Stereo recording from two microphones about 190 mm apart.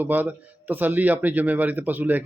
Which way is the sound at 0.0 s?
10° right (ahead or behind).